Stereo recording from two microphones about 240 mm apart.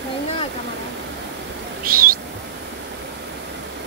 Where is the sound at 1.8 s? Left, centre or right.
Right.